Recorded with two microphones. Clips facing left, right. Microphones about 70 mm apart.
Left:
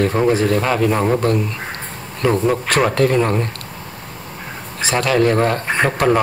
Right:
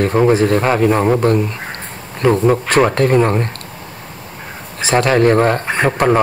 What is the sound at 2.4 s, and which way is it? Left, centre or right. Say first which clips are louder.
Speech: right 4 dB; right.